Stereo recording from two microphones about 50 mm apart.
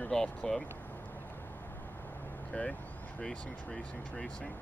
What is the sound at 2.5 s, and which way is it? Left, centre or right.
Speech, left.